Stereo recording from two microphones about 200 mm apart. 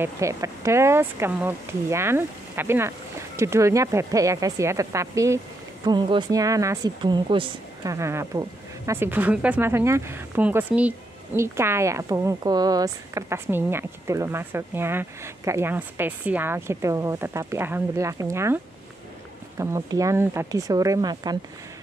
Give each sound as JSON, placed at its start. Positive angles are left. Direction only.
{"t": 0.0, "sound": "speech", "side_deg": -15}
{"t": 19.6, "sound": "speech", "side_deg": -15}